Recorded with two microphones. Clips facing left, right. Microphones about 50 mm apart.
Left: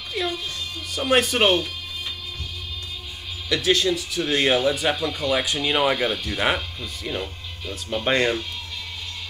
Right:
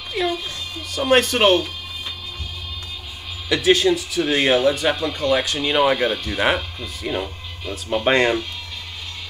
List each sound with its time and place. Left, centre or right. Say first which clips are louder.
0.1 s music: right 4 dB; centre
0.9 s speech: right 3 dB; centre
3.4 s speech: right 4 dB; centre
5.2 s speech: right 4 dB; centre
5.6 s speech: right 3 dB; centre
7.1 s speech: right 5 dB; right